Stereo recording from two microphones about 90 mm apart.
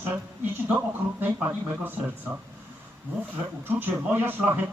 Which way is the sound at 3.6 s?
20° right (ahead or behind).